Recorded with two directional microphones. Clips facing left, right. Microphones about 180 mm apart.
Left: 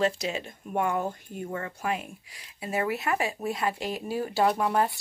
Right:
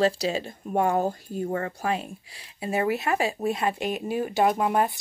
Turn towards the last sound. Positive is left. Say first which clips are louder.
# right 2 dB
turn(degrees=-20)  # may be behind; listen again after turning